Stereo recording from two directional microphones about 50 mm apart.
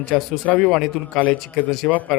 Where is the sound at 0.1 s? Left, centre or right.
Centre.